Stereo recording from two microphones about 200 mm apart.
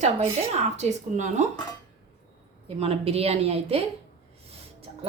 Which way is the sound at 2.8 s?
30° right (ahead or behind).